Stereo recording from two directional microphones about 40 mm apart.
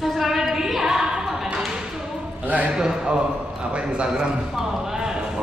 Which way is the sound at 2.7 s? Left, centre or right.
Centre.